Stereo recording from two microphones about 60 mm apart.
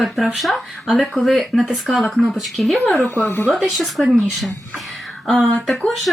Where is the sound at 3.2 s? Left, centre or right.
Left.